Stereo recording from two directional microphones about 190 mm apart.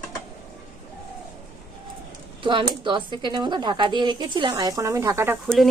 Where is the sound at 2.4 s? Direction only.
25° right (ahead or behind).